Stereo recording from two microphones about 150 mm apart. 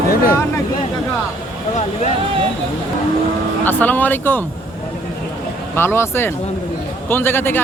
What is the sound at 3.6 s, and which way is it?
Speech, 10° left (ahead or behind).